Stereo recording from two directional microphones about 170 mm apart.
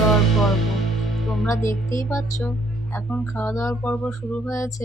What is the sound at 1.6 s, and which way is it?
Speech, 50° left (ahead or behind).